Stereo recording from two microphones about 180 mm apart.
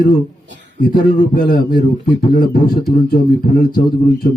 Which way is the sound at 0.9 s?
55° left (ahead or behind).